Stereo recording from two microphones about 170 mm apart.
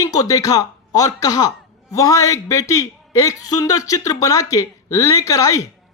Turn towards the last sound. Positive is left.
turn(degrees=20)  # may be behind; listen again after turning